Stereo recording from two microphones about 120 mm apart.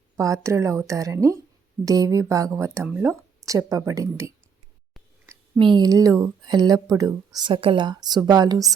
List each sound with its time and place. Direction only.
0.2 s speech: 25° right (ahead or behind)
5.5 s speech: 40° right (ahead or behind)